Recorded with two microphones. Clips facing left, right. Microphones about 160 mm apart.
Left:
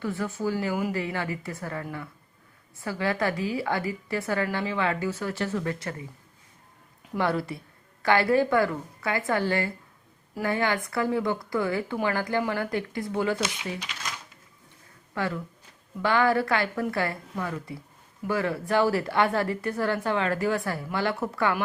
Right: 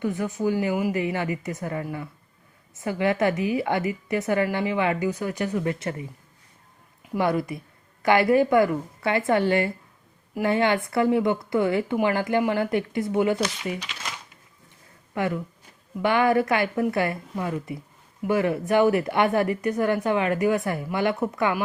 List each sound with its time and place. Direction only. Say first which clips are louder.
0.0 s a woman's voice: right 4 dB; 20° right (ahead or behind)
7.1 s a woman's voice: right 3 dB; 15° right (ahead or behind)
15.1 s speech: right 4 dB; 20° right (ahead or behind)